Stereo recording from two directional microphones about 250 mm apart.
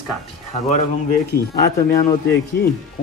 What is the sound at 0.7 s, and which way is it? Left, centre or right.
Speech, left.